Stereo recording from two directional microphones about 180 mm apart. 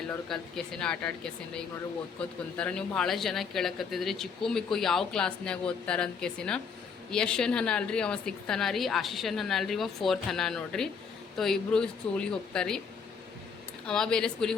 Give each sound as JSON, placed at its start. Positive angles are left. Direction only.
{"t": 0.3, "sound": "speech", "side_deg": 0}
{"t": 13.8, "sound": "speech", "side_deg": 5}